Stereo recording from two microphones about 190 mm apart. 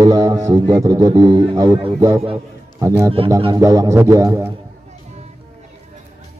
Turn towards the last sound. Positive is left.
turn(degrees=-15)  # may be behind; listen again after turning